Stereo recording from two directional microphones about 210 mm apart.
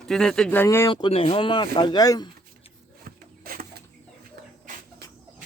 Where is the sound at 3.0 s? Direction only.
45° right (ahead or behind).